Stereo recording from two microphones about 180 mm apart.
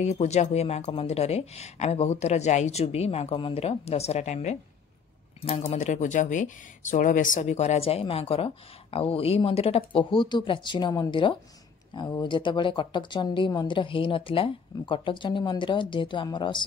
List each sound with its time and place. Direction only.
0.0 s speech: 40° left (ahead or behind)